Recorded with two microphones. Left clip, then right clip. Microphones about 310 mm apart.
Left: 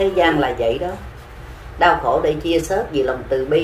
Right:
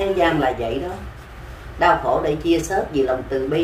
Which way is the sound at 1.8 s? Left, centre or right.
Centre.